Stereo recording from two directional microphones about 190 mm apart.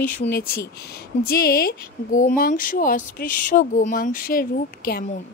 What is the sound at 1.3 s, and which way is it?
Speech, 55° left (ahead or behind).